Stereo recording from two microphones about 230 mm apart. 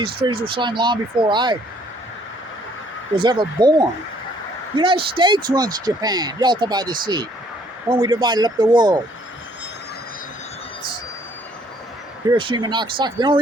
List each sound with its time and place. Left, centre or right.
0.0 s speech: right
3.2 s speech: centre
12.3 s speech: centre